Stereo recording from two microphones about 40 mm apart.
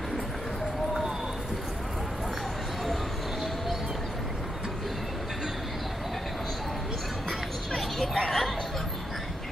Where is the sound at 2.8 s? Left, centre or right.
Centre.